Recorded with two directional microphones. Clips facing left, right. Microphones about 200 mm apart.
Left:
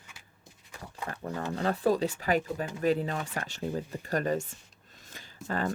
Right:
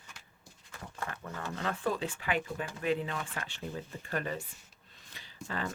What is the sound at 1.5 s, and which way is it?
Speech, 35° left (ahead or behind).